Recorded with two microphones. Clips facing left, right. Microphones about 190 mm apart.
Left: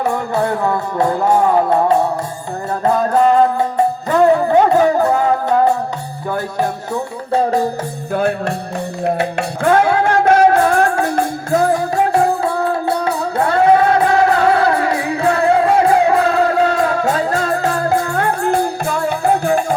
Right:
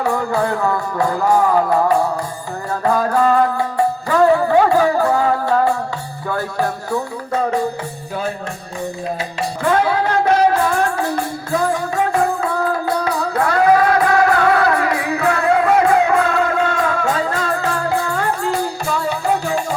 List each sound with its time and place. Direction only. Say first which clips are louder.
0.0 s music: left 1 dB; 20° left (ahead or behind)
8.1 s music: left 8 dB; 60° left (ahead or behind)